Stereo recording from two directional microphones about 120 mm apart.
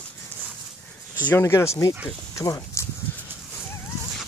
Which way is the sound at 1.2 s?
20° left (ahead or behind).